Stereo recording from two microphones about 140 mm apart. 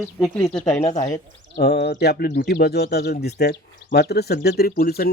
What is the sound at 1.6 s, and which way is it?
Speech, 90° left.